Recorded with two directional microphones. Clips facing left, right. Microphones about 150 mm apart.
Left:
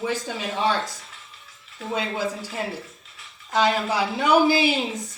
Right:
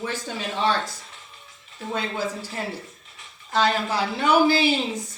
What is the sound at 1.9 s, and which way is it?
Speech, 10° left (ahead or behind).